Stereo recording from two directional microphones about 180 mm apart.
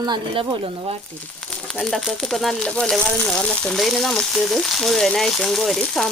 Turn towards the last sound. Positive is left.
turn(degrees=0)  # may be behind; listen again after turning